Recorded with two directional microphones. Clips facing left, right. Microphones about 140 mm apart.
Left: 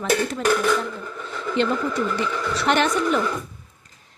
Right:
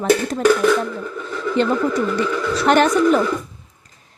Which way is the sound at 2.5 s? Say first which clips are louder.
Right 6 dB; 40° right (ahead or behind).